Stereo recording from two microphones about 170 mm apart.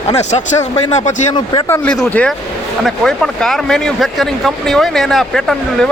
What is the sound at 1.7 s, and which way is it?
Speech, 10° left (ahead or behind).